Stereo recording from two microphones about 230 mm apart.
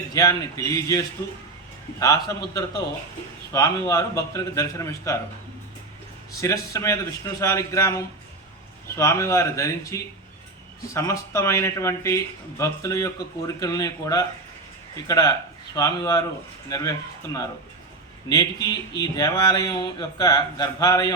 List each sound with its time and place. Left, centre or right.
0.1 s speech: centre
6.3 s speech: centre
18.3 s speech: centre